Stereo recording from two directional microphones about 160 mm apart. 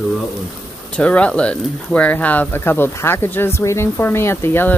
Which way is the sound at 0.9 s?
5° left (ahead or behind).